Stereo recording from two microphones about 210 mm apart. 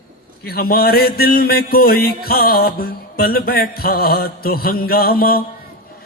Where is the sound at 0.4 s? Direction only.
45° left (ahead or behind).